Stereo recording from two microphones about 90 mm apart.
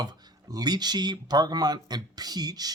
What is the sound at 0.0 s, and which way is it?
Speech, 50° right (ahead or behind).